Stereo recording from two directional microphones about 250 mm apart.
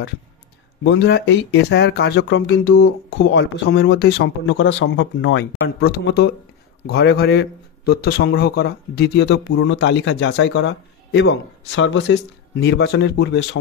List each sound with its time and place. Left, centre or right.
0.8 s a man's voice: left